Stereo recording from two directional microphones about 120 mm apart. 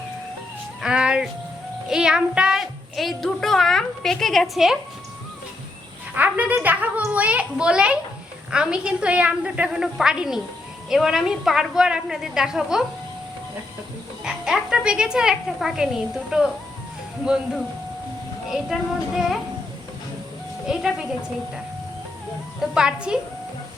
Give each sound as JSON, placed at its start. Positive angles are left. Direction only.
{"t": 0.8, "sound": "music", "side_deg": -5}
{"t": 1.9, "sound": "a woman's voice", "side_deg": -5}
{"t": 6.1, "sound": "a woman's voice", "side_deg": -15}
{"t": 14.3, "sound": "speech", "side_deg": -5}
{"t": 18.5, "sound": "a woman's voice", "side_deg": -5}
{"t": 20.7, "sound": "a woman's voice", "side_deg": -5}
{"t": 22.7, "sound": "a woman's voice", "side_deg": -5}